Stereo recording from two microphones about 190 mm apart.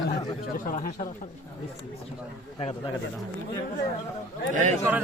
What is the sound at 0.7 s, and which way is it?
Speech, 45° left (ahead or behind).